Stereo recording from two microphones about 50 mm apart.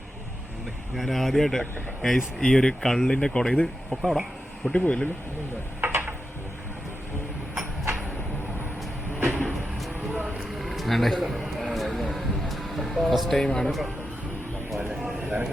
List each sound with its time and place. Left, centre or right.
0.9 s speech: centre
4.0 s speech: centre
4.7 s speech: left
5.8 s a sound: right
9.2 s vehicle: right
10.3 s a sound: centre
12.1 s music: centre
13.4 s speech: centre
14.8 s a sound: right